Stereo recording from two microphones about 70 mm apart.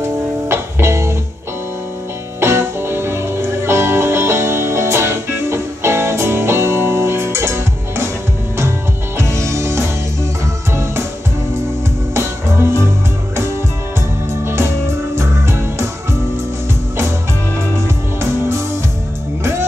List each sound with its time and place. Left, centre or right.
0.0 s music: right
2.4 s music: right
9.2 s music: right
12.1 s music: right
14.4 s music: right